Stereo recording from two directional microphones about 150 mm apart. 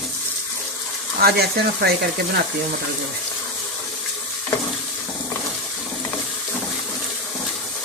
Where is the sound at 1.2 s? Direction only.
90° right.